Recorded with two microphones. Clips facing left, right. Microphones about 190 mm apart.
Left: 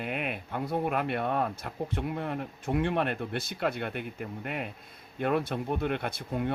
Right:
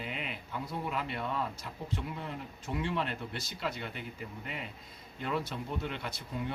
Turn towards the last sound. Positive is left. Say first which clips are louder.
# left 6 dB
turn(degrees=55)  # may be behind; listen again after turning